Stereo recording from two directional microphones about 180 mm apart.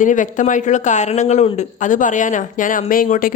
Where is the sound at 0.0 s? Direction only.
45° left (ahead or behind).